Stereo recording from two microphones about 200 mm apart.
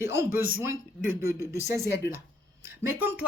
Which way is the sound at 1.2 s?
15° right (ahead or behind).